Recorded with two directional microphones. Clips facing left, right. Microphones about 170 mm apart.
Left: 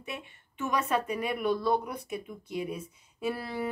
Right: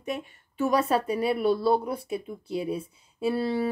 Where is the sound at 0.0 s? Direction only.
40° right (ahead or behind).